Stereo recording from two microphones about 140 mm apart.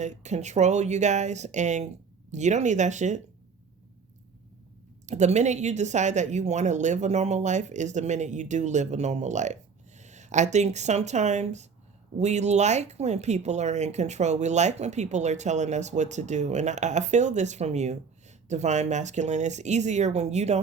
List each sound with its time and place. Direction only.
0.0 s speech: 55° right (ahead or behind)
5.0 s speech: 55° right (ahead or behind)